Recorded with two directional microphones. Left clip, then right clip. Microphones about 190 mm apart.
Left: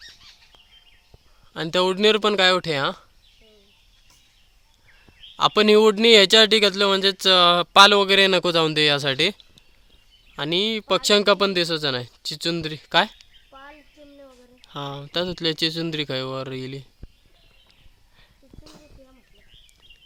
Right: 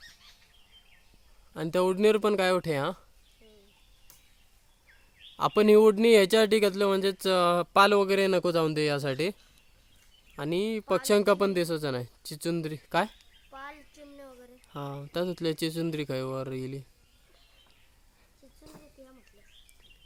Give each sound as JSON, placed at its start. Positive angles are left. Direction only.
{"t": 1.5, "sound": "speech", "side_deg": -5}
{"t": 5.4, "sound": "speech", "side_deg": -5}
{"t": 13.5, "sound": "a sound", "side_deg": -25}
{"t": 14.6, "sound": "speech", "side_deg": -5}